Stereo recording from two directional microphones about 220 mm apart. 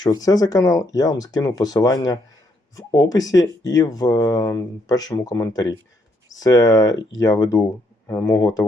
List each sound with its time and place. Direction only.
0.0 s speech: 20° left (ahead or behind)